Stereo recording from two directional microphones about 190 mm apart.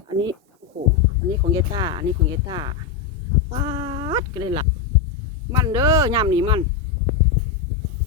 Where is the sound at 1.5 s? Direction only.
20° right (ahead or behind).